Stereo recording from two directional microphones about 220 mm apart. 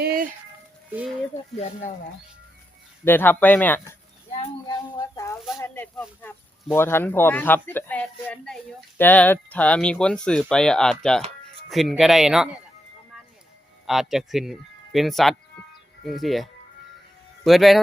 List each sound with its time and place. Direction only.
0.0 s music: 40° right (ahead or behind)
3.0 s speech: 10° left (ahead or behind)
4.7 s a sound: 15° left (ahead or behind)
5.5 s speech: 10° left (ahead or behind)
13.8 s speech: centre (ahead or behind)